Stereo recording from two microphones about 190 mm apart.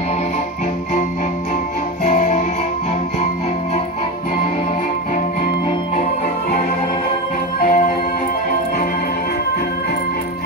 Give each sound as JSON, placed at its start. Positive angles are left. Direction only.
{"t": 2.0, "sound": "music", "side_deg": 40}
{"t": 7.6, "sound": "music", "side_deg": 40}